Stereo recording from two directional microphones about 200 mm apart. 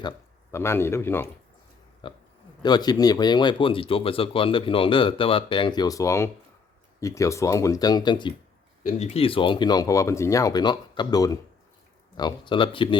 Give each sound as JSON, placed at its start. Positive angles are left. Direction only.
{"t": 0.5, "sound": "speech", "side_deg": 15}
{"t": 2.0, "sound": "speech", "side_deg": 25}
{"t": 8.8, "sound": "speech", "side_deg": 35}